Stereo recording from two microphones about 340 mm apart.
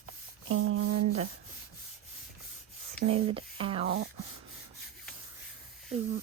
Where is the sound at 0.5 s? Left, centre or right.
Right.